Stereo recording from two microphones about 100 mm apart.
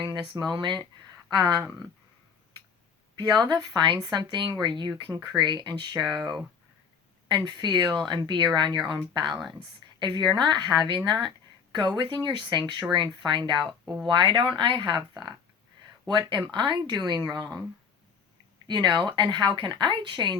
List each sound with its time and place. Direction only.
0.0 s speech: 40° right (ahead or behind)
3.3 s speech: 45° right (ahead or behind)
7.3 s speech: 50° right (ahead or behind)
18.7 s speech: 45° right (ahead or behind)